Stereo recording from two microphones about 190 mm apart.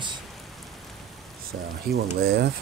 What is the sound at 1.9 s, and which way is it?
Speech, 60° right (ahead or behind).